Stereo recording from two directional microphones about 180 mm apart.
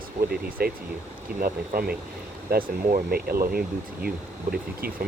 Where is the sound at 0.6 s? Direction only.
60° right (ahead or behind).